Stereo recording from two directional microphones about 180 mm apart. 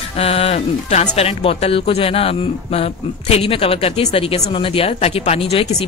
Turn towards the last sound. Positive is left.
turn(degrees=35)  # may be behind; listen again after turning